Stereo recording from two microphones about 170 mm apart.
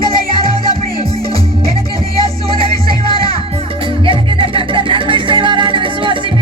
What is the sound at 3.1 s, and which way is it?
Music, 30° right (ahead or behind).